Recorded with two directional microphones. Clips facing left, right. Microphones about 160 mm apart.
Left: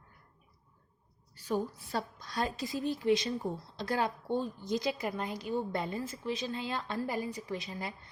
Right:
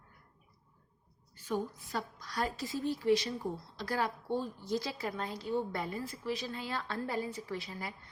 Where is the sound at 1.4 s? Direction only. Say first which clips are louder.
Left 2 dB; 35° left (ahead or behind).